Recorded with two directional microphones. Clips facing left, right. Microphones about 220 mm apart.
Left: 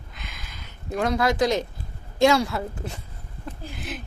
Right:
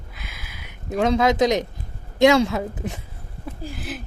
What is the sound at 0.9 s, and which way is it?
A woman's voice, 20° right (ahead or behind).